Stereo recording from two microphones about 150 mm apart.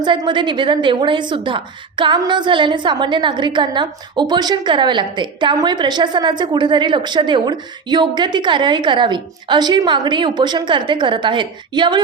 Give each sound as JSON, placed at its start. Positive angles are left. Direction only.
{"t": 0.0, "sound": "a woman's voice", "side_deg": -30}